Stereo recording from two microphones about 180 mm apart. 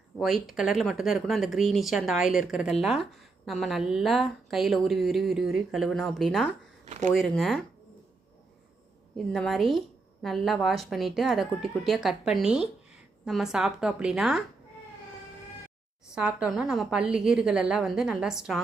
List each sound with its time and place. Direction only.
0.2 s speech: centre (ahead or behind)
6.8 s speech: 40° right (ahead or behind)
7.1 s speech: centre (ahead or behind)
9.1 s speech: centre (ahead or behind)
16.1 s speech: 5° right (ahead or behind)